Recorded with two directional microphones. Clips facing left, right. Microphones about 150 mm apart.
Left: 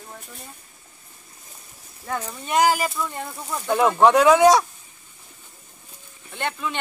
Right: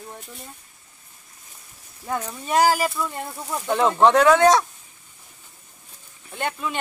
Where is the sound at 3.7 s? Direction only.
10° left (ahead or behind).